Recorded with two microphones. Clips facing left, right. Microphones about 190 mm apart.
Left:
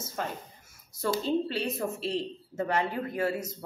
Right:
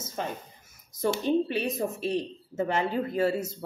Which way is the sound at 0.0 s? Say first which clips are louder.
Right 1 dB; 20° right (ahead or behind).